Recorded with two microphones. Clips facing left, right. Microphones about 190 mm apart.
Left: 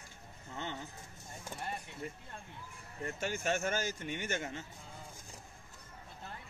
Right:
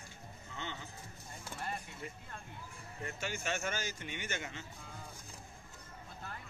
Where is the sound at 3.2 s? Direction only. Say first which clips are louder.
Left 5 dB; 45° left (ahead or behind).